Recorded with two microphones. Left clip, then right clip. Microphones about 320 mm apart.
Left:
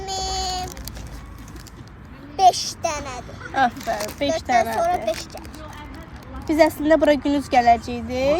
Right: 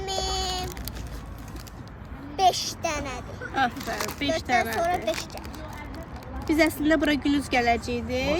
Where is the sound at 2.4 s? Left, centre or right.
Centre.